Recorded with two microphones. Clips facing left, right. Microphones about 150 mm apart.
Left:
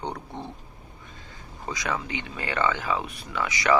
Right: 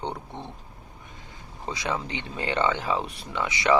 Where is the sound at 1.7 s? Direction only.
25° right (ahead or behind).